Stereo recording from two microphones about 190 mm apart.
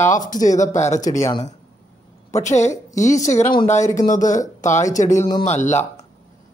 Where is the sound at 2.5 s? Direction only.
40° left (ahead or behind).